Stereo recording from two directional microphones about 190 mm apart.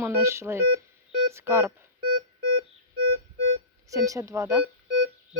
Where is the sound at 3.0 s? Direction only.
90° right.